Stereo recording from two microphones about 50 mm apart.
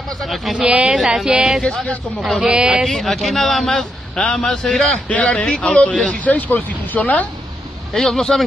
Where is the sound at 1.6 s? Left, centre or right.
Centre.